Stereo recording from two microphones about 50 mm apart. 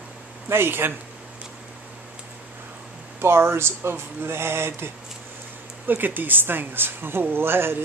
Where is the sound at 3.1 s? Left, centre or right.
Right.